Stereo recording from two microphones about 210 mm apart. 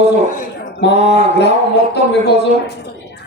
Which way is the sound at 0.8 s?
55° left (ahead or behind).